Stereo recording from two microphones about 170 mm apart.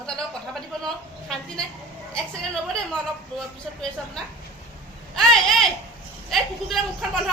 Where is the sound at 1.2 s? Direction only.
5° left (ahead or behind).